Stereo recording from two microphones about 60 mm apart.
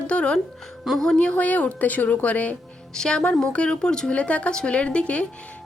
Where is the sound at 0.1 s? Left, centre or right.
Centre.